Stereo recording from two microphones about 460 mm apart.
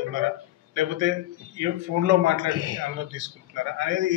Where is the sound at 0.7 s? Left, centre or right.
Right.